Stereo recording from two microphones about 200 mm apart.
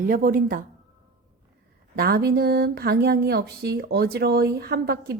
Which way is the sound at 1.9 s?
50° right (ahead or behind).